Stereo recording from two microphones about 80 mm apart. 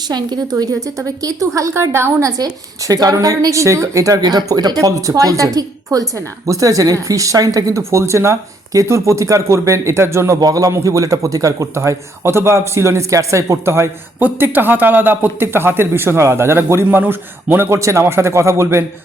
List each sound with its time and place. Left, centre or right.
0.1 s speech: right
2.4 s speech: right
10.4 s speech: right
14.2 s a man's voice: right